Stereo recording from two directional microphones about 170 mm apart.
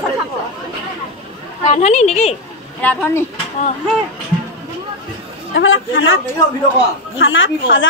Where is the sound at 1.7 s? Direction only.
40° left (ahead or behind).